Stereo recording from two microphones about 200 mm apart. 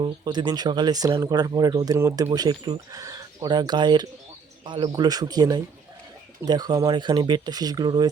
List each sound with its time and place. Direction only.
0.0 s speech: 20° right (ahead or behind)